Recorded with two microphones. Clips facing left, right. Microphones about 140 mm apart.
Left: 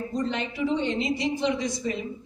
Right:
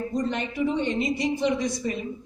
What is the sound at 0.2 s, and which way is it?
A woman's voice, 55° right (ahead or behind).